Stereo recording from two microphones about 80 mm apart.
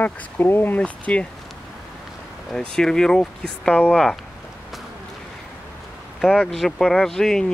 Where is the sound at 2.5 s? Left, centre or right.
Centre.